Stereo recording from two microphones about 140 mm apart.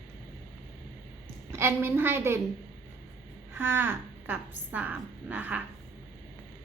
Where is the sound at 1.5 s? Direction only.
15° right (ahead or behind).